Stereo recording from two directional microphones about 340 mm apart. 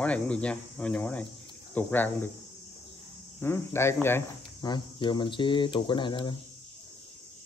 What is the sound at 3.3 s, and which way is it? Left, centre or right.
Cricket, centre.